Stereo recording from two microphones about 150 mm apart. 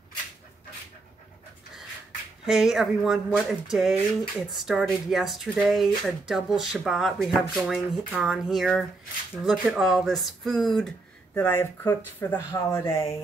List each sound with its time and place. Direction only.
2.4 s speech: centre (ahead or behind)
11.3 s speech: 15° left (ahead or behind)